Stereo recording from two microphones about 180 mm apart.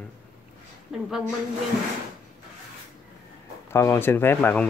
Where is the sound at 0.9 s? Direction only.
Centre (ahead or behind).